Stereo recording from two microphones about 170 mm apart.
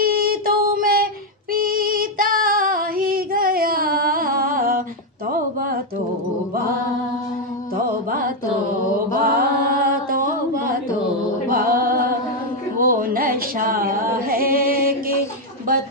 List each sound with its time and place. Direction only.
0.0 s female singing: 60° right (ahead or behind)
5.3 s a sound: 55° right (ahead or behind)
9.2 s mantra: 60° right (ahead or behind)
11.4 s music: 60° right (ahead or behind)